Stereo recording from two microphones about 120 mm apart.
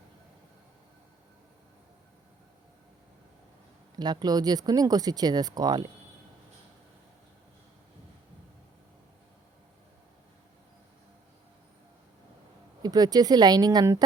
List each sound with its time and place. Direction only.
3.9 s speech: 35° right (ahead or behind)
12.8 s speech: 30° right (ahead or behind)